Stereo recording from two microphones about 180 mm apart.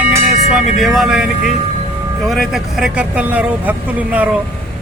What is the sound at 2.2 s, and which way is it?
Speech, centre (ahead or behind).